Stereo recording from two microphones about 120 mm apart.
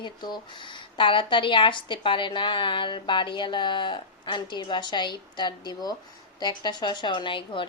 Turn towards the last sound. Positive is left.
turn(degrees=45)  # may be behind; listen again after turning